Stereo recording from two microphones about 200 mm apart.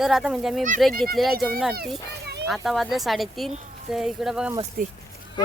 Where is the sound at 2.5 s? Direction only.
Centre (ahead or behind).